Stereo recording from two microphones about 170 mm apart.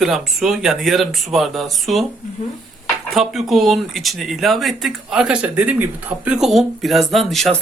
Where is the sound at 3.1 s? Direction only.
Centre (ahead or behind).